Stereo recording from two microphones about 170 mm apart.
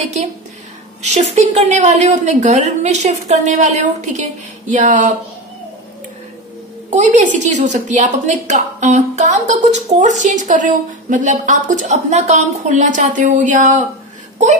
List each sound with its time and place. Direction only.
1.0 s a woman's voice: 40° right (ahead or behind)
6.9 s a woman's voice: 45° right (ahead or behind)